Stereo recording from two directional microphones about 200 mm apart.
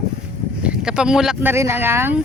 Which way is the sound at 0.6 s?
5° right (ahead or behind).